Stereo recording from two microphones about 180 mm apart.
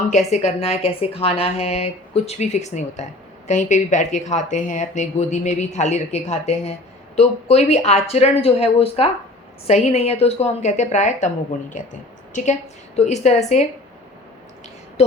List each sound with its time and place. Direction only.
0.1 s speech: 40° left (ahead or behind)
13.0 s speech: 40° left (ahead or behind)